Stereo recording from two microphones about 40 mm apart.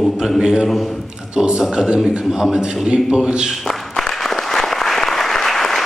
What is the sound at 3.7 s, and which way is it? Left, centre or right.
Applause, centre.